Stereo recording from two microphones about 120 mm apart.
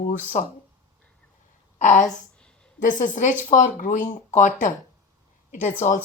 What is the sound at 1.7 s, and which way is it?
A woman's voice, 90° left.